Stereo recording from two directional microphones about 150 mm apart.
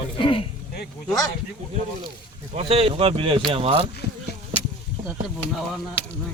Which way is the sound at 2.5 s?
40° right (ahead or behind).